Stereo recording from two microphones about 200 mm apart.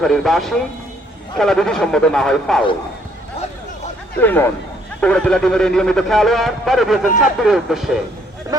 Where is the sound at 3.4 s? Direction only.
30° left (ahead or behind).